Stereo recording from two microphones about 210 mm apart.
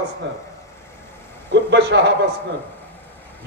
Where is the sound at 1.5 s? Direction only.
55° right (ahead or behind).